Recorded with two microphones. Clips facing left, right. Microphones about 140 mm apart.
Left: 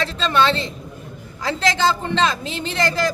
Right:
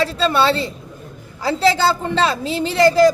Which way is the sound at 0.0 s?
10° right (ahead or behind).